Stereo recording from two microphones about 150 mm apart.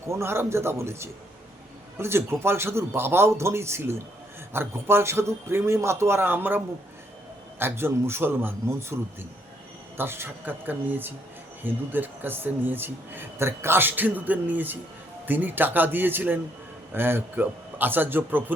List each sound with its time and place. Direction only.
0.1 s a man's voice: 15° right (ahead or behind)
7.6 s a man's voice: 15° right (ahead or behind)
10.0 s a man's voice: 15° right (ahead or behind)